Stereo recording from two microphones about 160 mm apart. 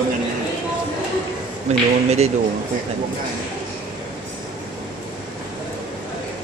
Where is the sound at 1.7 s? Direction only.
45° right (ahead or behind).